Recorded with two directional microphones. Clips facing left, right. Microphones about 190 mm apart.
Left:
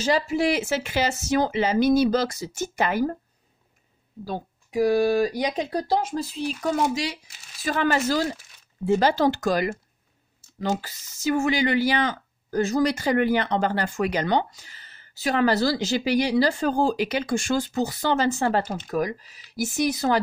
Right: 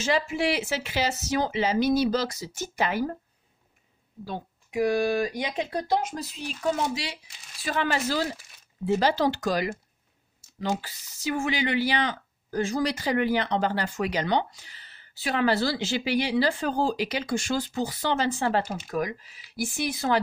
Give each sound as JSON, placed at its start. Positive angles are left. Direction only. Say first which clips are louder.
{"t": 0.0, "sound": "speech", "louder": "left 3 dB", "side_deg": 35}
{"t": 4.2, "sound": "speech", "louder": "left 4 dB", "side_deg": 35}
{"t": 7.6, "sound": "speech", "louder": "left 4 dB", "side_deg": 45}